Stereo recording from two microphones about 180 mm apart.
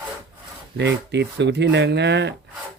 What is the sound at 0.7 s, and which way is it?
Speech, 75° right (ahead or behind).